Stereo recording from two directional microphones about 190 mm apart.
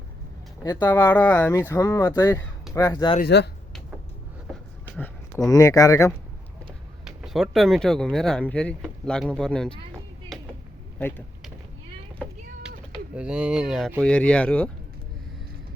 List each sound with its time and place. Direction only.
0.6 s speech: 20° left (ahead or behind)
3.2 s speech: 60° left (ahead or behind)
4.9 s speech: 10° left (ahead or behind)
7.0 s speech: centre (ahead or behind)
13.1 s speech: 5° right (ahead or behind)